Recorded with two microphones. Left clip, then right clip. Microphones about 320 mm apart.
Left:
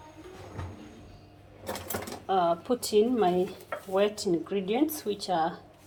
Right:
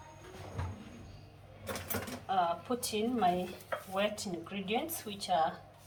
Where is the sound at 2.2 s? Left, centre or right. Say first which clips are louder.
Left 6 dB; left.